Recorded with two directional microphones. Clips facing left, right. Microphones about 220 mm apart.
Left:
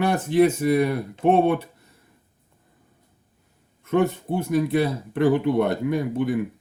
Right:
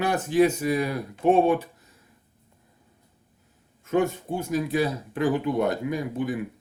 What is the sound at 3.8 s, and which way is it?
Speech, 60° left (ahead or behind).